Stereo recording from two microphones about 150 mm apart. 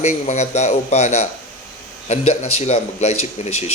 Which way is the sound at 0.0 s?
50° left (ahead or behind).